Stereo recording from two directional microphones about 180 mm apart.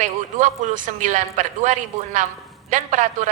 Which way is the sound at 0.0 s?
40° right (ahead or behind).